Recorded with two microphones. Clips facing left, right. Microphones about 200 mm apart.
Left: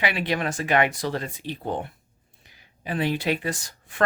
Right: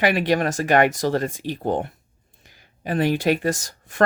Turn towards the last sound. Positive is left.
turn(degrees=-45)  # may be behind; listen again after turning